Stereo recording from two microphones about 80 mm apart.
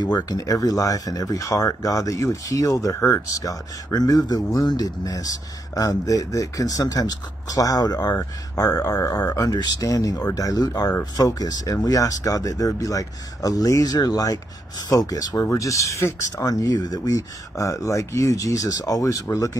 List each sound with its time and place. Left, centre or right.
0.0 s speech: left
3.4 s speech: left
16.4 s speech: left